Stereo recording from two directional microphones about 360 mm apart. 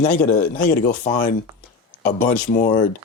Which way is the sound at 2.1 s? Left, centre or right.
Left.